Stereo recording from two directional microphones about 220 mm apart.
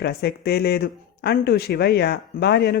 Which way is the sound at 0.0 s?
50° left (ahead or behind).